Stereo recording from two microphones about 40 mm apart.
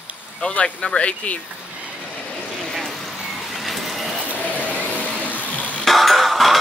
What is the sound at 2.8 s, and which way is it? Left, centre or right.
Vehicle, centre.